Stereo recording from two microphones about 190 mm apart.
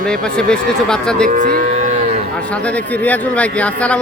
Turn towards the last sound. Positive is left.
turn(degrees=5)  # may be behind; listen again after turning